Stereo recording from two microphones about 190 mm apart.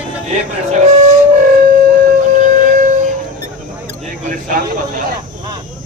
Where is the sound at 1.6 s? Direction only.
45° right (ahead or behind).